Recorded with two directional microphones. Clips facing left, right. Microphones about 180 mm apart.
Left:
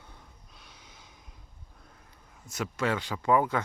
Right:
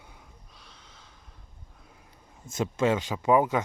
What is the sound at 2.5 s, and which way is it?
Speech, 25° right (ahead or behind).